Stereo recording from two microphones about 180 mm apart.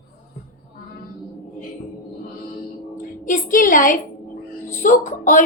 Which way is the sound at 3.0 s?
50° left (ahead or behind).